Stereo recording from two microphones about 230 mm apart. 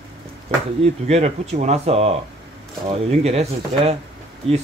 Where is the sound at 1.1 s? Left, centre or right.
Right.